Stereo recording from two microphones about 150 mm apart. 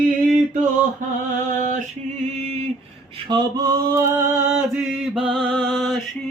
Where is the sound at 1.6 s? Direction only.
60° right (ahead or behind).